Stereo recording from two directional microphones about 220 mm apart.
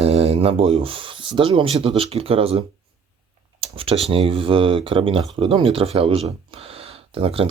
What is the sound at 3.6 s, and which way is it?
Speech, 25° right (ahead or behind).